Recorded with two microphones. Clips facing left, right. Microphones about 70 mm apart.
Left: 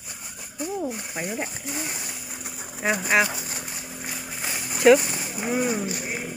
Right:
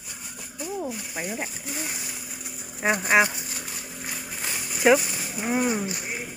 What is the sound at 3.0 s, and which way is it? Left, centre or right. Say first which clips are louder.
Speech: right 2 dB; centre.